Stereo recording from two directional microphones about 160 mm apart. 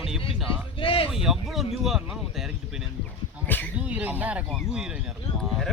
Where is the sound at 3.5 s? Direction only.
10° left (ahead or behind).